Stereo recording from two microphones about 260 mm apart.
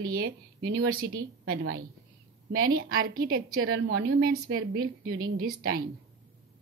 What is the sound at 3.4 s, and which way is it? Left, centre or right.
A woman's voice, right.